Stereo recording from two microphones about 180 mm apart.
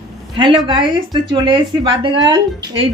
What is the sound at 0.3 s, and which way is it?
Speech, 25° right (ahead or behind).